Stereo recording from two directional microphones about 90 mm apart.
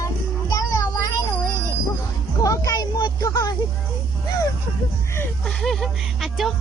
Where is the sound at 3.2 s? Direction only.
45° left (ahead or behind).